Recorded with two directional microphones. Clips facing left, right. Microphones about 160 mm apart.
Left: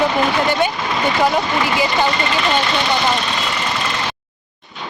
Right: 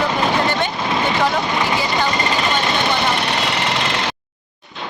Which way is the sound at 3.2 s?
70° right (ahead or behind).